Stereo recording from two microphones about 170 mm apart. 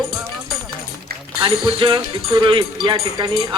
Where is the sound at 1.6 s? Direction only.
30° right (ahead or behind).